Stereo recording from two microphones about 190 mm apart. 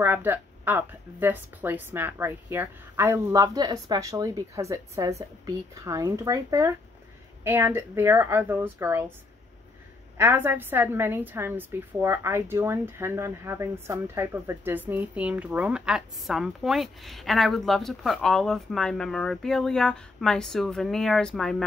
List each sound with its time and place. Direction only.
0.0 s a woman's voice: 10° right (ahead or behind)
10.1 s a woman's voice: 10° right (ahead or behind)